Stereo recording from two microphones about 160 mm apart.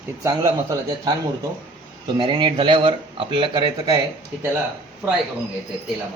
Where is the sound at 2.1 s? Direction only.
30° right (ahead or behind).